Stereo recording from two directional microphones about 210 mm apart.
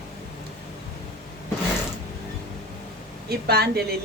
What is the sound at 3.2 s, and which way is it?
Speech, 50° right (ahead or behind).